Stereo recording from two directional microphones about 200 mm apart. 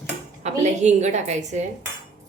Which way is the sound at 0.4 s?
35° right (ahead or behind).